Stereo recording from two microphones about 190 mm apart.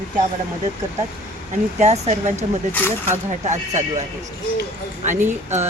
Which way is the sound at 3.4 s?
35° right (ahead or behind).